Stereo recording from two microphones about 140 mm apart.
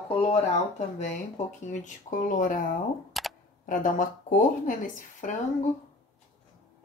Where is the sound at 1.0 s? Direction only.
60° left (ahead or behind); by 2.8 s 75° left (ahead or behind).